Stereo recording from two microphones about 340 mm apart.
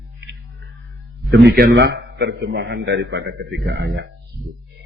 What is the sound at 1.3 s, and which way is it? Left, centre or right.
A man's voice, right.